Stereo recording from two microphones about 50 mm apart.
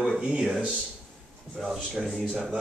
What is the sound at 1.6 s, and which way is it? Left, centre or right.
Speech, centre.